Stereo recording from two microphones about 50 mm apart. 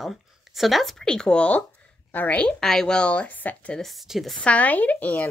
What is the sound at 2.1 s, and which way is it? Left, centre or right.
Speech, left.